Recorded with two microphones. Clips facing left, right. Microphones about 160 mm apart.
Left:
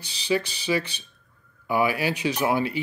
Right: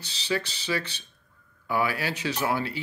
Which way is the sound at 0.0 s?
15° left (ahead or behind).